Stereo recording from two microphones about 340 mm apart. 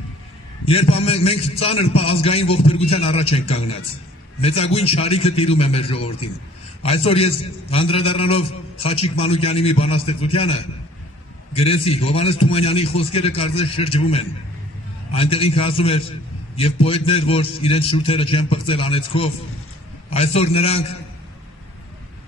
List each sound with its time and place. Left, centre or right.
0.7 s a man's voice: centre